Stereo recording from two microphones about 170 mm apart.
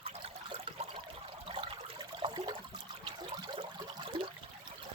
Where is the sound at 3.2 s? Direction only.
25° right (ahead or behind).